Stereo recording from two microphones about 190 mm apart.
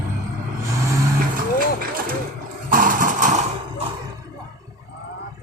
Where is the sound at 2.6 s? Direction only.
45° right (ahead or behind).